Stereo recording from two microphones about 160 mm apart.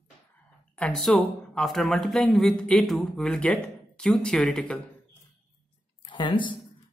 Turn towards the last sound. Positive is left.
turn(degrees=30)  # may be behind; listen again after turning